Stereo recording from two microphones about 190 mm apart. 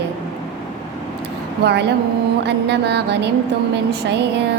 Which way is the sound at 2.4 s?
60° right (ahead or behind).